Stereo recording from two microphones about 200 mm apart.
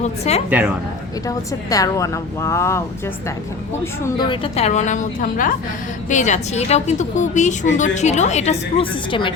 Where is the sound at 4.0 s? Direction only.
25° left (ahead or behind).